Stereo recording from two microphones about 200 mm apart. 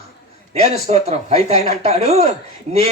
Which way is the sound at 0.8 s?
30° right (ahead or behind).